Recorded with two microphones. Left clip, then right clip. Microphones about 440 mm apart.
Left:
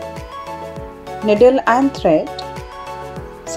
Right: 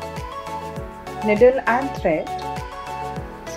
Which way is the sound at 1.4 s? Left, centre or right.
Centre.